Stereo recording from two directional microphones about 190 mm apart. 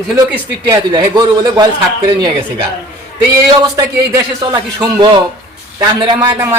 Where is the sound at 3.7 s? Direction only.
20° right (ahead or behind).